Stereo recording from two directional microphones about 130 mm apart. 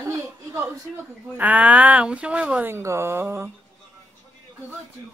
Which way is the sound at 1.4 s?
10° right (ahead or behind).